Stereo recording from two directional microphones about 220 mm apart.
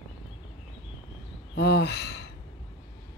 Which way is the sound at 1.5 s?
50° left (ahead or behind).